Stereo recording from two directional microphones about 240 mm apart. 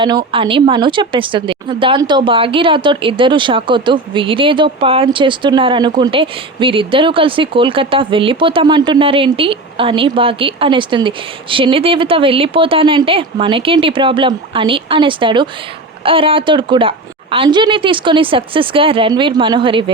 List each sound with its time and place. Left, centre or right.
0.3 s speech: right